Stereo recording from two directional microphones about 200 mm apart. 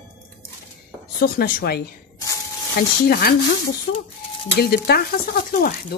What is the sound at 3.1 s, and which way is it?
Speech, 50° left (ahead or behind).